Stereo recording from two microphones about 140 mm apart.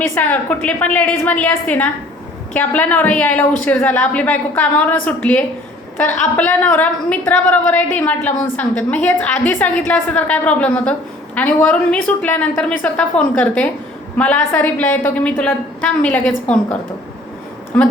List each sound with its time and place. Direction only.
0.1 s a woman's voice: 10° left (ahead or behind)